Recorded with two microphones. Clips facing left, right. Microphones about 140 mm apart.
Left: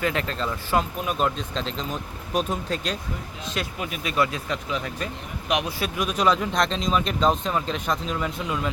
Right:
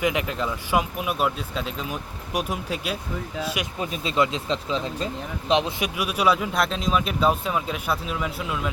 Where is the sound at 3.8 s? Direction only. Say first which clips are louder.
Right 2 dB; 25° right (ahead or behind).